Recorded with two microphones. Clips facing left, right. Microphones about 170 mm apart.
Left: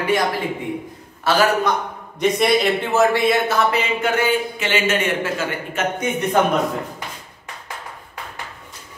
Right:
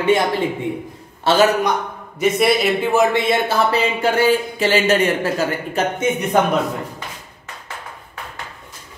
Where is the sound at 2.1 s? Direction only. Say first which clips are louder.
Right 1 dB; 5° right (ahead or behind); by 5.8 s 35° right (ahead or behind).